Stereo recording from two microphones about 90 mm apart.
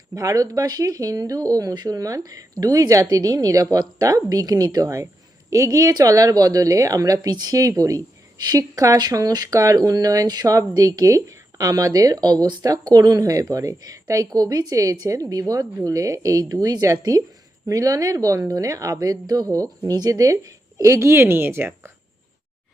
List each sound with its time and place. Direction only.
0.1 s speech: 40° right (ahead or behind)